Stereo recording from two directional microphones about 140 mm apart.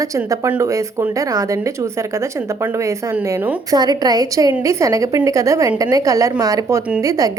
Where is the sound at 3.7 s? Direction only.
30° right (ahead or behind).